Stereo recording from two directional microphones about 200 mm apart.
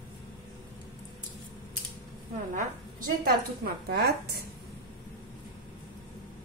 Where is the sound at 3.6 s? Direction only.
50° right (ahead or behind).